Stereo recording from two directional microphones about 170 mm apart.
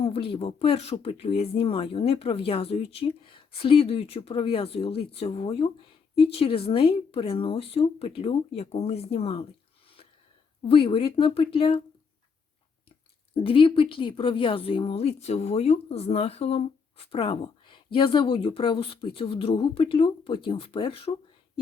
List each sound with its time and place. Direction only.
0.0 s a woman's voice: 35° left (ahead or behind)
10.6 s a woman's voice: 35° left (ahead or behind)
13.3 s a woman's voice: 30° left (ahead or behind)